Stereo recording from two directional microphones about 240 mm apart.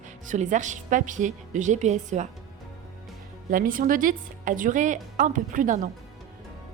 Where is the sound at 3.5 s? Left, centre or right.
Right.